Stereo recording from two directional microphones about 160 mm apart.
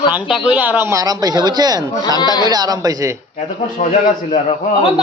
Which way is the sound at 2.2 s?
25° left (ahead or behind).